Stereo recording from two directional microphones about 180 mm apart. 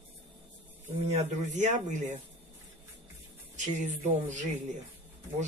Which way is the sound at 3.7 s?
40° right (ahead or behind).